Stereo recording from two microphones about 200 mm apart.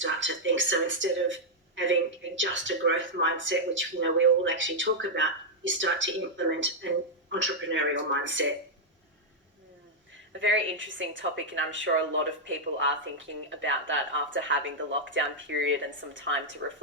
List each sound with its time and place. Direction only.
0.0 s speech: 70° right (ahead or behind)
10.4 s speech: 70° right (ahead or behind)